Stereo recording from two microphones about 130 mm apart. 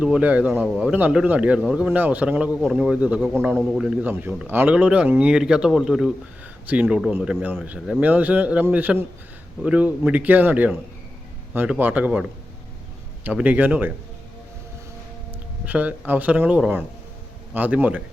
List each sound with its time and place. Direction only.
0.0 s a man's voice: 10° right (ahead or behind)
13.2 s speech: 10° right (ahead or behind)
15.6 s speech: 10° right (ahead or behind)